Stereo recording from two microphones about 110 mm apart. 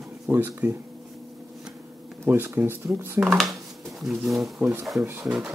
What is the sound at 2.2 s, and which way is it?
Speech, 20° right (ahead or behind).